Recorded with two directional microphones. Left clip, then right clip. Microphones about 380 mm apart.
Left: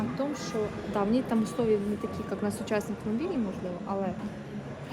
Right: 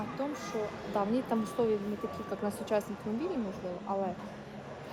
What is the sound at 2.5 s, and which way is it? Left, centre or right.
Speech, centre.